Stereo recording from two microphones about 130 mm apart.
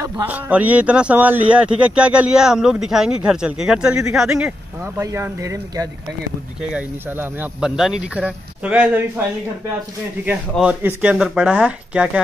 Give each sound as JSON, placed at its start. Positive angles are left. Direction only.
{"t": 0.0, "sound": "speech", "side_deg": -15}
{"t": 6.7, "sound": "speech", "side_deg": -15}
{"t": 7.6, "sound": "speech", "side_deg": -5}
{"t": 10.6, "sound": "speech", "side_deg": -15}
{"t": 11.1, "sound": "speech", "side_deg": 0}
{"t": 11.4, "sound": "speech", "side_deg": -10}